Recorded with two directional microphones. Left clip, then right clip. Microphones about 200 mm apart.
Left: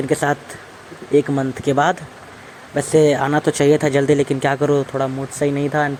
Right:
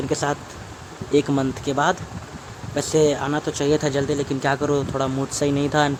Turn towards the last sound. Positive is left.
turn(degrees=-5)  # may be behind; listen again after turning